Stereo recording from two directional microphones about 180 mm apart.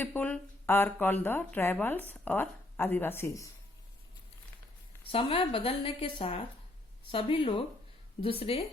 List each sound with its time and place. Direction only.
0.0 s speech: 10° left (ahead or behind)
5.1 s a woman's voice: 30° left (ahead or behind)